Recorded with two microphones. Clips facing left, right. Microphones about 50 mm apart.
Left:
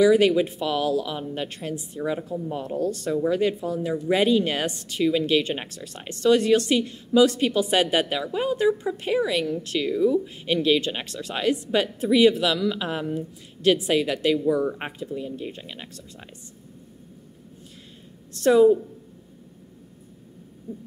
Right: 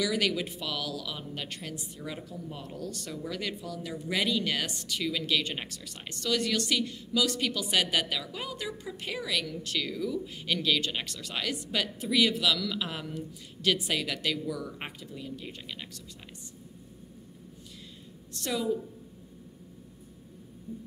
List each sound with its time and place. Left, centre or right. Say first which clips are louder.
0.0 s a woman's voice: left 12 dB; left
18.4 s a woman's voice: left 15 dB; left